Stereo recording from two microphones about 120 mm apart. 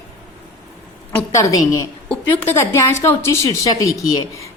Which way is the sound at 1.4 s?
30° left (ahead or behind).